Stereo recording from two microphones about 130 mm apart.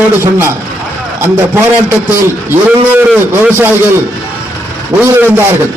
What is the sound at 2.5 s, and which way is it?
A man's voice, 15° right (ahead or behind).